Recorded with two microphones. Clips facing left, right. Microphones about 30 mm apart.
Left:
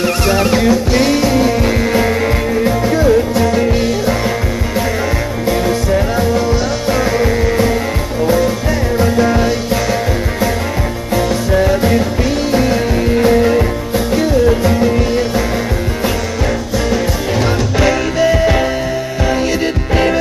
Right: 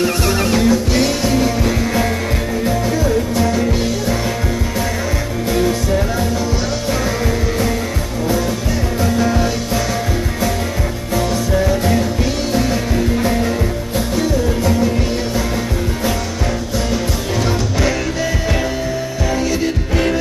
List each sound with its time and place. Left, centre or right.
0.0 s music: centre
1.6 s music: left
2.6 s music: left
3.5 s music: centre
5.5 s music: centre
6.9 s music: left
9.0 s music: left
11.1 s music: centre; by 14.7 s left
18.2 s music: left